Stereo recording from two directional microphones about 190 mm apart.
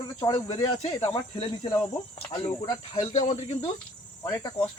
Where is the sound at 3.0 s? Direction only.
40° left (ahead or behind).